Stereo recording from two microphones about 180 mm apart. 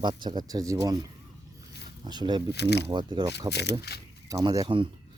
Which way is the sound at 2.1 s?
25° right (ahead or behind).